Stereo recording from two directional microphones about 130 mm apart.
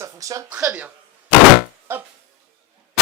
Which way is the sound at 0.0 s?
25° right (ahead or behind).